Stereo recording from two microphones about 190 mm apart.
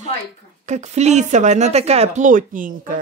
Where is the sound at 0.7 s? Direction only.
35° right (ahead or behind).